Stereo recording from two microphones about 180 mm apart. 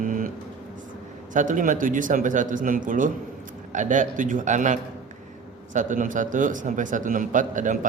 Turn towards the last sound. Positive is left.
turn(degrees=-45)  # may be behind; listen again after turning